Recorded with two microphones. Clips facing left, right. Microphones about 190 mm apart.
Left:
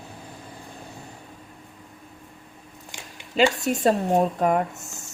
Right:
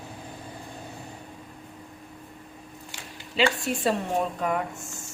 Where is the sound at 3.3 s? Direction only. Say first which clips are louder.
Left 4 dB; 45° left (ahead or behind).